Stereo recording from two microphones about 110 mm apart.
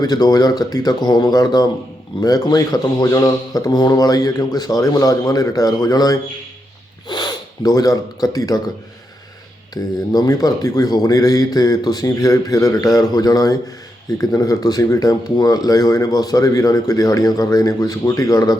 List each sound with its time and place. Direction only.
0.0 s speech: 35° left (ahead or behind)
9.7 s speech: 35° left (ahead or behind)